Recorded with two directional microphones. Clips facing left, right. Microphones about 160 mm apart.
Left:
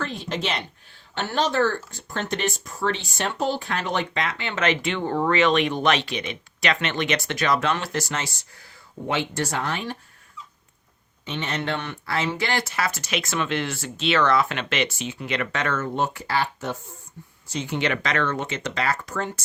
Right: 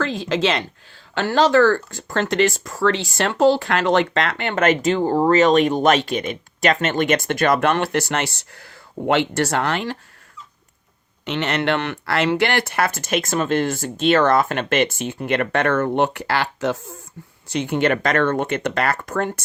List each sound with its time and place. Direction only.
0.0 s speech: 90° right
11.3 s speech: 75° right (ahead or behind)
17.5 s speech: 60° right (ahead or behind)